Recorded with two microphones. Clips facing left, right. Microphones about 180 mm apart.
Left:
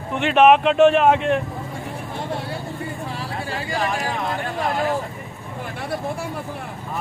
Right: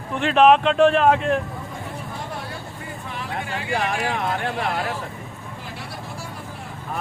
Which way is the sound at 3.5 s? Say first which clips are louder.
Even; 40° left (ahead or behind).